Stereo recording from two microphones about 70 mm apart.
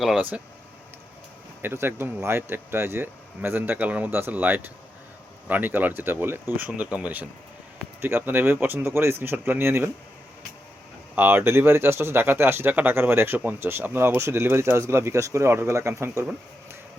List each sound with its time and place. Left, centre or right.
0.2 s speech: right
1.6 s speech: right
6.7 s speech: centre
11.1 s speech: right